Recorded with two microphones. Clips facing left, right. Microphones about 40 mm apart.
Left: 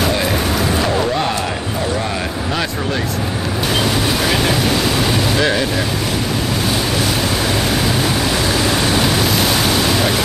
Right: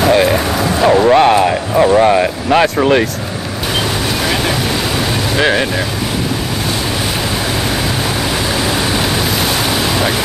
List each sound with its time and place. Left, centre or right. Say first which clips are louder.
1.0 s a sound: right 10 dB; right
2.5 s speech: right 12 dB; right
5.4 s speech: right 6 dB; right
8.9 s waves: even; centre